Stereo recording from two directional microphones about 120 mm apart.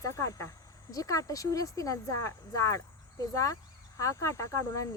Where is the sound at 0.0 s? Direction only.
25° left (ahead or behind).